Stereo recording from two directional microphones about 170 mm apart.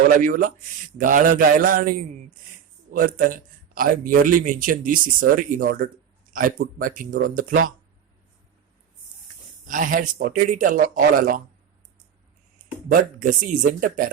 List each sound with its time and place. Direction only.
0.2 s a man's voice: 50° right (ahead or behind)
9.6 s speech: 50° right (ahead or behind)
12.9 s speech: 50° right (ahead or behind)